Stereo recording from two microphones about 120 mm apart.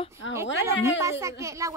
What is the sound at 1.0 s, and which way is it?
Speech, 25° right (ahead or behind).